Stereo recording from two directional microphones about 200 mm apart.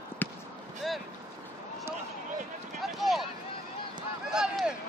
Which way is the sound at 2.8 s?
Centre (ahead or behind).